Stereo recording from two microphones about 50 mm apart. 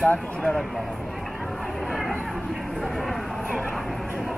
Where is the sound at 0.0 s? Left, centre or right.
Left.